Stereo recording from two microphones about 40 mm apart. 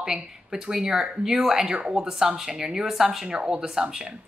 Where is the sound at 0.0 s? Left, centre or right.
Centre.